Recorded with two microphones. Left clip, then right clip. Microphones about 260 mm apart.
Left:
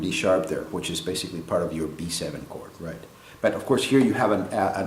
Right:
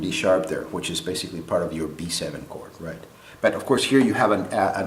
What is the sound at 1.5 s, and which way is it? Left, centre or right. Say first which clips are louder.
Speech: right 1 dB; centre.